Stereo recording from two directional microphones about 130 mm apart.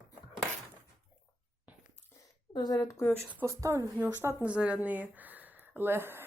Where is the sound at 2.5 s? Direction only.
30° left (ahead or behind).